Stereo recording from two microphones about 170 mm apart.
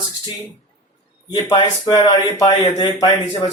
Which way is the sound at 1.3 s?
25° left (ahead or behind).